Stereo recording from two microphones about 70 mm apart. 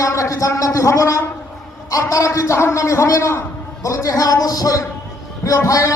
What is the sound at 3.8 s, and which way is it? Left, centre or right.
A man's voice, left.